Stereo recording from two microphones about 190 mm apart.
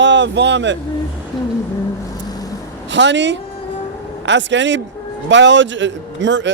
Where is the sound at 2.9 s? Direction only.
70° right (ahead or behind).